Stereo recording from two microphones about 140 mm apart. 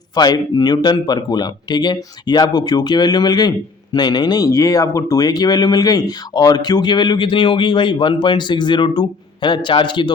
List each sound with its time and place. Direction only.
0.2 s speech: 30° left (ahead or behind)